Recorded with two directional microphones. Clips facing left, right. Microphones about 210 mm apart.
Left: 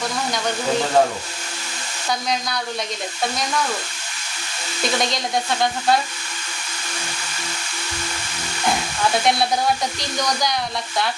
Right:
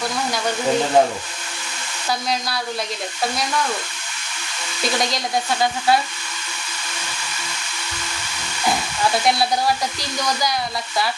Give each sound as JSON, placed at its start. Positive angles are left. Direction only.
{"t": 1.0, "sound": "speech", "side_deg": -15}
{"t": 5.1, "sound": "frying", "side_deg": -5}
{"t": 9.2, "sound": "frying", "side_deg": 0}